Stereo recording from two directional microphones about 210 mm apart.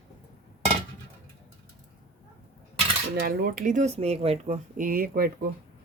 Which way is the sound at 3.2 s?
40° right (ahead or behind).